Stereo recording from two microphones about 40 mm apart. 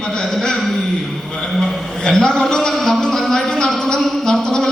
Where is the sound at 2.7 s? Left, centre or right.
Centre.